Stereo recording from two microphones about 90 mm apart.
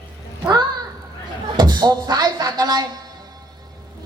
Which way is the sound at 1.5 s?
55° right (ahead or behind).